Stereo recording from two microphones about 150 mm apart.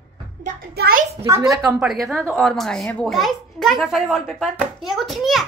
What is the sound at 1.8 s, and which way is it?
A child's voice, centre (ahead or behind).